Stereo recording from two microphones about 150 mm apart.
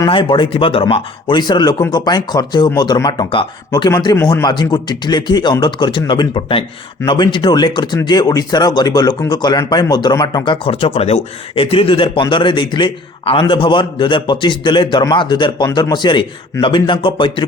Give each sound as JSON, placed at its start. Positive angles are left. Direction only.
{"t": 0.0, "sound": "speech", "side_deg": 35}